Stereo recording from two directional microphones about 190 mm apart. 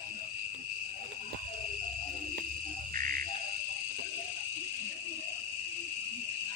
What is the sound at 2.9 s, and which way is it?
Insect, 45° right (ahead or behind).